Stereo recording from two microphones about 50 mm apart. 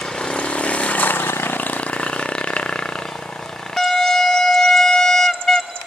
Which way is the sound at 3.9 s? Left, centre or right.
Centre.